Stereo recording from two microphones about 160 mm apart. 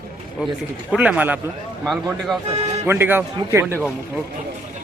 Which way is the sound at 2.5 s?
40° right (ahead or behind).